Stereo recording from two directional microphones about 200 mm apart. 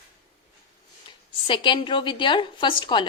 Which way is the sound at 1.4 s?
25° left (ahead or behind).